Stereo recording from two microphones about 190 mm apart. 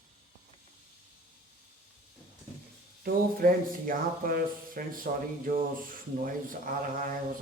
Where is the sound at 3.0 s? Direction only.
50° right (ahead or behind).